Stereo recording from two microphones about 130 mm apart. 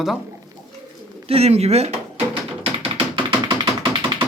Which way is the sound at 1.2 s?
55° right (ahead or behind).